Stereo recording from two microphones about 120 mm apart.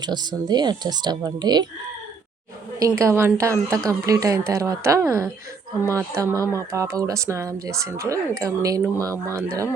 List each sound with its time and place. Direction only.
0.0 s speech: 35° right (ahead or behind)
2.7 s a woman's voice: 25° right (ahead or behind)